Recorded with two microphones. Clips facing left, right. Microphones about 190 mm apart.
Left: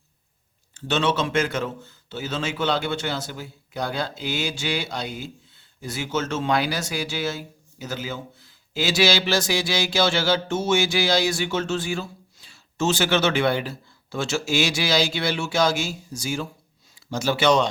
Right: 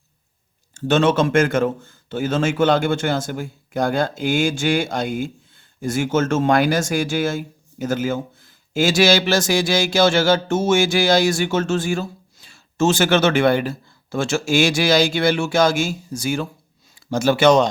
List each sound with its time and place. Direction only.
0.7 s speech: 50° right (ahead or behind)